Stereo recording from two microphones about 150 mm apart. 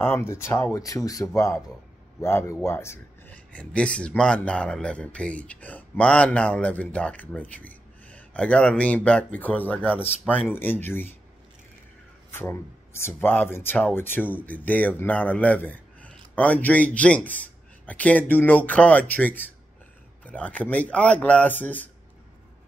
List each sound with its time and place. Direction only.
0.0 s speech: 15° left (ahead or behind)
3.5 s speech: 5° left (ahead or behind)
12.3 s speech: 15° left (ahead or behind)